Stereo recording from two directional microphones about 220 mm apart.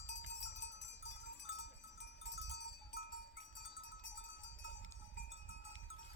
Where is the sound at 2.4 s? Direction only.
50° left (ahead or behind).